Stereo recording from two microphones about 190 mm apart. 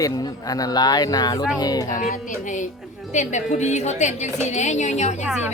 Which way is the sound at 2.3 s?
40° left (ahead or behind).